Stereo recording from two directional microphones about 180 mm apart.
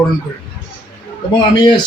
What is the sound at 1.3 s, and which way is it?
Speech, 25° left (ahead or behind).